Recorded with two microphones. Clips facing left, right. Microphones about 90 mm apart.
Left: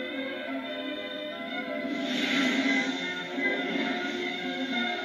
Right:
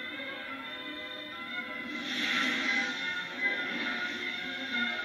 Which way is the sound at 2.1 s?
70° left (ahead or behind).